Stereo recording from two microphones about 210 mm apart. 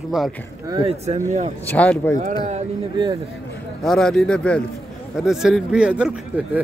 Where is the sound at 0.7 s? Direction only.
25° right (ahead or behind).